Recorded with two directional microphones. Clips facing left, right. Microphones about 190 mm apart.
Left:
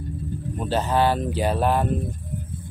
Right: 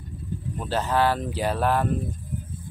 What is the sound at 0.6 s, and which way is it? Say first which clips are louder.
Speech: left 2 dB; 20° left (ahead or behind).